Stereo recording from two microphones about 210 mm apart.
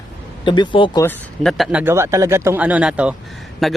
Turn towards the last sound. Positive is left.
turn(degrees=0)  # may be behind; listen again after turning